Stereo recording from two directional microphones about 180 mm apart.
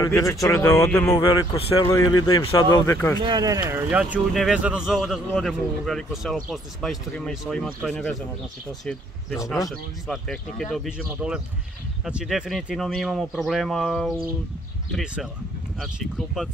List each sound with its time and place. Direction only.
0.0 s speech: 15° left (ahead or behind)
3.2 s speech: 25° right (ahead or behind)
3.7 s speech: 10° right (ahead or behind)
9.7 s speech: centre (ahead or behind)